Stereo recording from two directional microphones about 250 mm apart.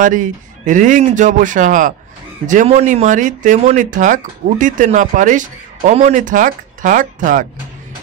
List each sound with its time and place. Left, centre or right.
0.0 s speech: right